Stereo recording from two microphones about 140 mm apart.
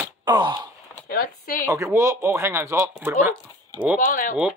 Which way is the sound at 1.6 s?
20° right (ahead or behind).